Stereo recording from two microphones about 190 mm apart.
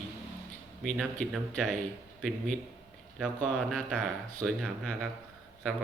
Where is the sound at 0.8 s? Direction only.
Centre (ahead or behind).